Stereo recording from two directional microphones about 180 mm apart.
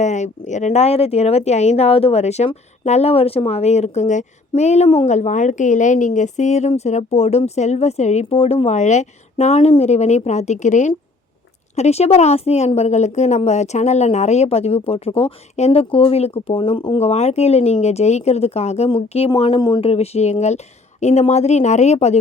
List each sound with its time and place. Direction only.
0.0 s speech: 40° left (ahead or behind)